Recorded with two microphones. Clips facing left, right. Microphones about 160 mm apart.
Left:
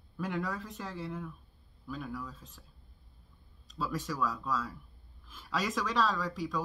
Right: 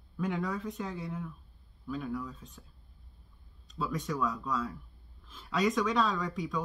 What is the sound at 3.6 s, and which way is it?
Speech, centre (ahead or behind).